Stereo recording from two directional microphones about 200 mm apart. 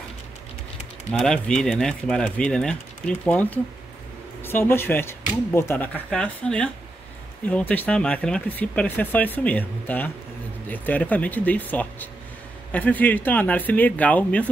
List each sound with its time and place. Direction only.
1.2 s speech: 5° left (ahead or behind)